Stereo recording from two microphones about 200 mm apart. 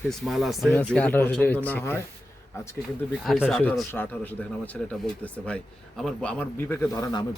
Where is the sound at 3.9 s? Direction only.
10° left (ahead or behind).